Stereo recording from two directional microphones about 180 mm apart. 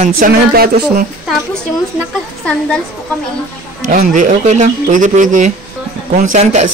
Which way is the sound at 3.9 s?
45° right (ahead or behind).